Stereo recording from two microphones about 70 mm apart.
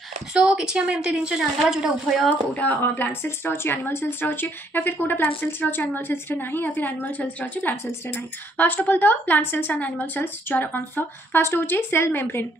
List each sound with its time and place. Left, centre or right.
0.3 s speech: centre
1.6 s speech: centre
2.2 s a woman's voice: left